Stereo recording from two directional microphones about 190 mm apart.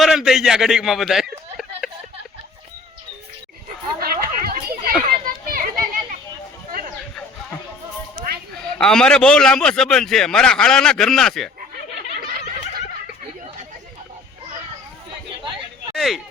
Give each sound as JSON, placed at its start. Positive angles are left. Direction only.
{"t": 0.0, "sound": "a man's voice", "side_deg": 0}
{"t": 4.0, "sound": "children playing", "side_deg": -50}
{"t": 8.8, "sound": "a man's voice", "side_deg": 5}
{"t": 16.0, "sound": "a man's voice", "side_deg": 0}